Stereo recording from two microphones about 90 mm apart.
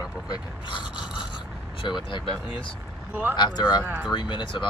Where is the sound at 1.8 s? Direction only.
60° left (ahead or behind).